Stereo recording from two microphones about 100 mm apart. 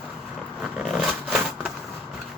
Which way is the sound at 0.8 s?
Centre (ahead or behind).